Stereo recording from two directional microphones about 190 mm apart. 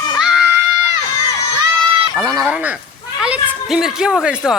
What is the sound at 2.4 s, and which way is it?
Speech, 5° right (ahead or behind).